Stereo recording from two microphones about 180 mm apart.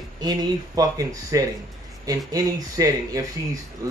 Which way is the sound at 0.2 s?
20° right (ahead or behind).